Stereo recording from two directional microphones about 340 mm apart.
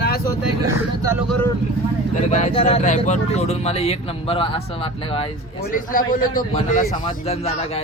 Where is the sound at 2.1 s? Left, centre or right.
Left.